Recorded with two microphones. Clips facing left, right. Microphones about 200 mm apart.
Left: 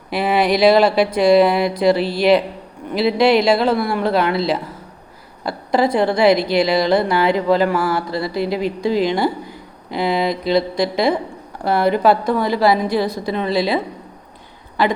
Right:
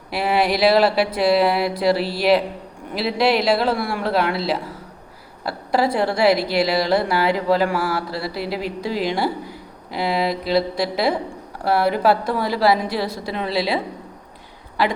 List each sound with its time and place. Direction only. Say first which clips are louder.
0.1 s a woman's voice: left 3 dB; 5° right (ahead or behind)